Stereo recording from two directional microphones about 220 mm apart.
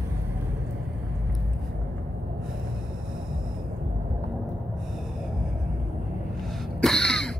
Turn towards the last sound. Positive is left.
turn(degrees=0)  # may be behind; listen again after turning